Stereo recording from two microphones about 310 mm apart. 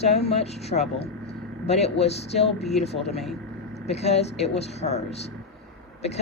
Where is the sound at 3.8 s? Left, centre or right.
Left.